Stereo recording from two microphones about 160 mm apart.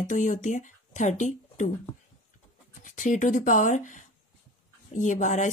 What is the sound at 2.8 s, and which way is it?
Speech, 55° left (ahead or behind).